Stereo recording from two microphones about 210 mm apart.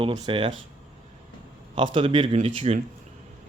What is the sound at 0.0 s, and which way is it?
Speech, 25° right (ahead or behind).